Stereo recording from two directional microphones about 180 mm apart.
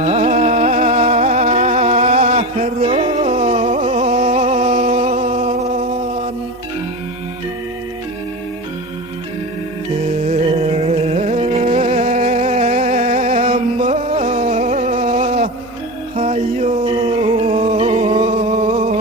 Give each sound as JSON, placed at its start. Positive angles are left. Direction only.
{"t": 0.0, "sound": "music", "side_deg": -40}
{"t": 10.2, "sound": "music", "side_deg": -35}